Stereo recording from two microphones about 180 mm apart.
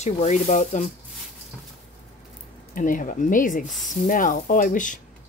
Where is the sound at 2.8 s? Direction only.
50° left (ahead or behind).